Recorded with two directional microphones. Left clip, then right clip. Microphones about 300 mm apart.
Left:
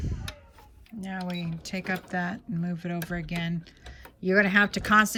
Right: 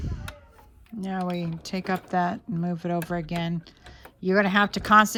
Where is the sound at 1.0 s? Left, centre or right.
Centre.